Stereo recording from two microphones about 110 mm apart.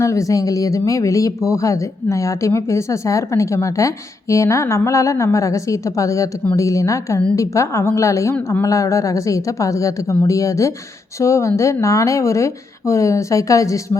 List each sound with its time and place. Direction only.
0.0 s a woman's voice: 30° left (ahead or behind)